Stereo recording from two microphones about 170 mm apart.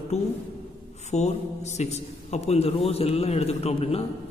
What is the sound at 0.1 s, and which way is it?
A man's voice, 40° left (ahead or behind).